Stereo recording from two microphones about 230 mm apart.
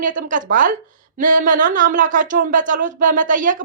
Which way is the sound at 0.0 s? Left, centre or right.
Right.